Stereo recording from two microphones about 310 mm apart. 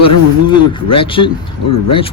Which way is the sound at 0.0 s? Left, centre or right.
Centre.